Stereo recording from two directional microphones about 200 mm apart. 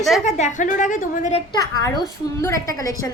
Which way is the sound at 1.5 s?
15° left (ahead or behind).